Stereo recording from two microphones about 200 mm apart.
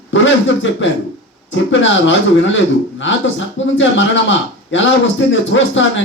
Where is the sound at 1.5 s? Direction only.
70° left (ahead or behind).